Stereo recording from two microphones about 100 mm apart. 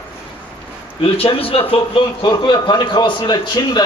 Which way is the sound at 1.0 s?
70° left (ahead or behind).